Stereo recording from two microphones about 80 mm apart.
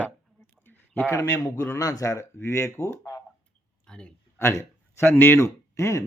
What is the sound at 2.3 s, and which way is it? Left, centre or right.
Speech, left.